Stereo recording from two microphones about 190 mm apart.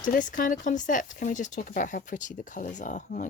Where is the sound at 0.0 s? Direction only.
40° left (ahead or behind).